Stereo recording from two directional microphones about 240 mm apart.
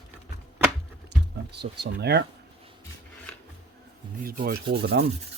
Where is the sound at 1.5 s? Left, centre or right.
Right.